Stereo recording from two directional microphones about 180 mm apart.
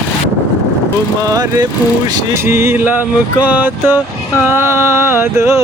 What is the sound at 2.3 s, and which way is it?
Speech, 15° right (ahead or behind).